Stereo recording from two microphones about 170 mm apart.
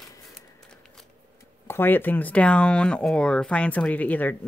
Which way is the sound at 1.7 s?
10° left (ahead or behind).